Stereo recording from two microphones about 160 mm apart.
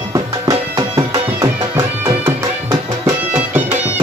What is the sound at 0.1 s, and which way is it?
Music, 20° right (ahead or behind).